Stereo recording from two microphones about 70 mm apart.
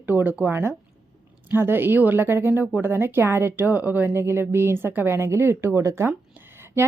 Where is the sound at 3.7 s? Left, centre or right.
Right.